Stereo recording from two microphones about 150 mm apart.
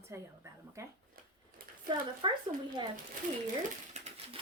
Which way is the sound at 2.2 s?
30° right (ahead or behind).